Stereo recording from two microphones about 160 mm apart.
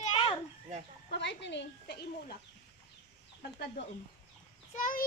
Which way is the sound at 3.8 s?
90° left.